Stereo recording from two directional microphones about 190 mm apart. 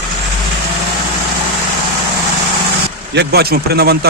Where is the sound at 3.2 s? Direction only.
55° right (ahead or behind).